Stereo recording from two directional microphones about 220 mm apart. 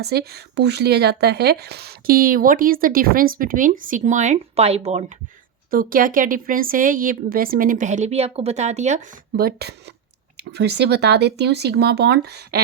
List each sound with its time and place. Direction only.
0.0 s speech: 45° right (ahead or behind); by 9.0 s 30° right (ahead or behind)
9.3 s speech: 45° right (ahead or behind)